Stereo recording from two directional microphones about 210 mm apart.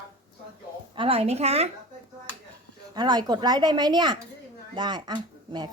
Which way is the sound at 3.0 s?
20° right (ahead or behind).